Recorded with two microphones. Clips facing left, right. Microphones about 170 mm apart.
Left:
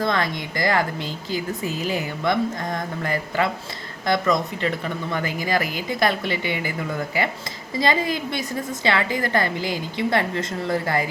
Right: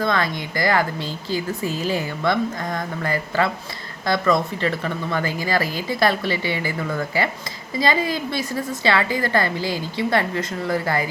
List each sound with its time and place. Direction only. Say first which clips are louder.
0.0 s speech: right 1 dB; 20° left (ahead or behind)